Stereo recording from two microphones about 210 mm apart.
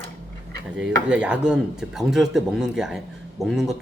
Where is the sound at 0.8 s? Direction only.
5° right (ahead or behind).